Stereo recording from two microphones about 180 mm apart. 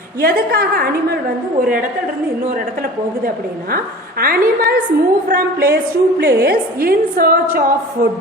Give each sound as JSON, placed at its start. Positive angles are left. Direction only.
{"t": 0.2, "sound": "a woman's voice", "side_deg": -55}
{"t": 3.2, "sound": "a woman's voice", "side_deg": -55}